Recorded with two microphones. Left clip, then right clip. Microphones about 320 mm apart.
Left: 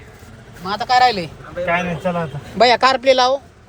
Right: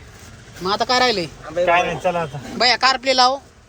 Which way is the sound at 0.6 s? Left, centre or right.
Centre.